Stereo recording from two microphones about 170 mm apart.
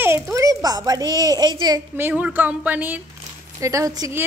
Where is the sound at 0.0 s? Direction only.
15° right (ahead or behind).